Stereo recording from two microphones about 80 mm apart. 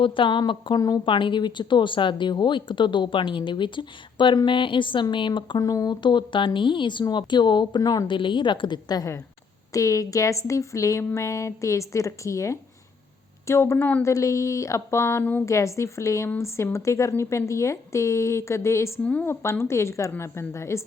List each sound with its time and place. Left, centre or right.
0.0 s speech: left
0.8 s speech: left
1.0 s a woman's voice: left
5.5 s speech: left
6.0 s speech: left
7.1 s a woman's voice: left
7.8 s speech: left
8.0 s speech: left
9.7 s speech: left
15.2 s a woman's voice: left
15.4 s speech: left
19.0 s speech: centre
19.3 s speech: left